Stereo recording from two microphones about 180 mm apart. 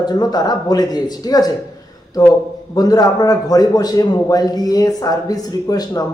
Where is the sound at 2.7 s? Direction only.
20° left (ahead or behind).